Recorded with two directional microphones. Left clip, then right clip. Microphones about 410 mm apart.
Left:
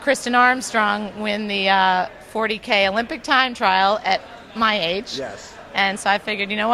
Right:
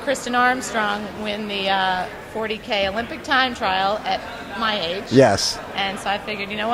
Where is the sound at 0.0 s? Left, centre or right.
Left.